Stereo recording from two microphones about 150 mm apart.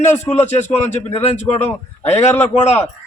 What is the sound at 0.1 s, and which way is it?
A man's voice, 45° left (ahead or behind).